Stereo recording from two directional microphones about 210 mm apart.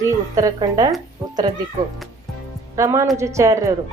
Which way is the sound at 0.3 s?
15° right (ahead or behind).